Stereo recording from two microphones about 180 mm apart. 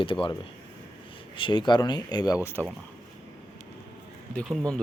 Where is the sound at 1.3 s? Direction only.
25° left (ahead or behind).